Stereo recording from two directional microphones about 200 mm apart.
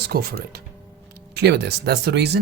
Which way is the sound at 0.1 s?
50° right (ahead or behind).